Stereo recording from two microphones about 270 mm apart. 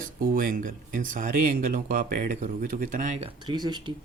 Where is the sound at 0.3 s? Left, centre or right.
Right.